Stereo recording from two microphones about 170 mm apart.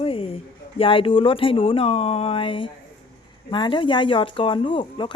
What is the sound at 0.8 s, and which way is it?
Speech, 30° left (ahead or behind).